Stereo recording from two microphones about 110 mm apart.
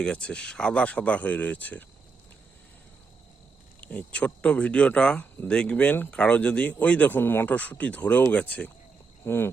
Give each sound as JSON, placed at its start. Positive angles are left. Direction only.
{"t": 0.0, "sound": "speech", "side_deg": 10}
{"t": 3.8, "sound": "speech", "side_deg": 10}
{"t": 9.2, "sound": "cricket", "side_deg": 20}